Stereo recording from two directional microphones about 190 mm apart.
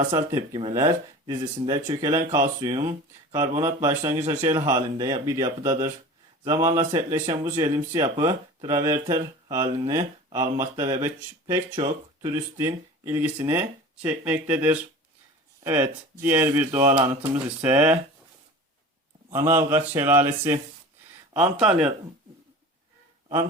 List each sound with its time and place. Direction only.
0.5 s speech: 20° right (ahead or behind)
19.3 s speech: 10° right (ahead or behind)